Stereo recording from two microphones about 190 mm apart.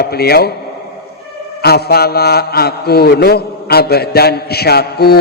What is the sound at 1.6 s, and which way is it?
A man's voice, 55° left (ahead or behind).